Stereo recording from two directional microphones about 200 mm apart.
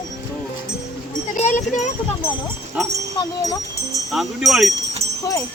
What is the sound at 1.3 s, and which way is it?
Speech, 40° left (ahead or behind).